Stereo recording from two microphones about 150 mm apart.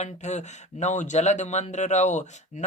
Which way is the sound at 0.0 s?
50° left (ahead or behind).